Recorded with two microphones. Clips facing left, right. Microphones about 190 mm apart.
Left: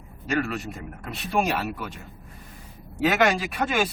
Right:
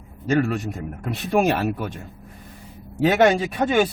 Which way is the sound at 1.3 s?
50° right (ahead or behind).